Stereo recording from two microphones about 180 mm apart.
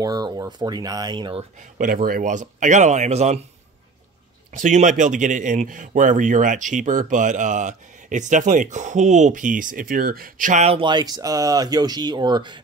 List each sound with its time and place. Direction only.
0.0 s speech: 20° right (ahead or behind)
1.8 s a man's voice: 50° right (ahead or behind); by 3.4 s 35° right (ahead or behind)
4.6 s a man's voice: 45° right (ahead or behind); by 12.5 s 25° right (ahead or behind)